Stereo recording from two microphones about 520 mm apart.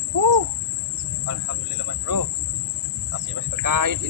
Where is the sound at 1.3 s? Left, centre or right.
Right.